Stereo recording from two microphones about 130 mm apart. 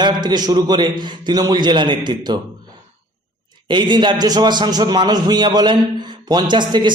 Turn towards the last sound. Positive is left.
turn(degrees=-35)  # may be behind; listen again after turning